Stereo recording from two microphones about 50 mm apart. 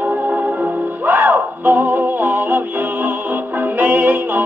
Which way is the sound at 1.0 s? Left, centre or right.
Right.